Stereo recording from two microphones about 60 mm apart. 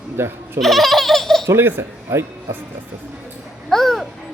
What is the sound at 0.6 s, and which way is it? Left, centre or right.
Speech, centre.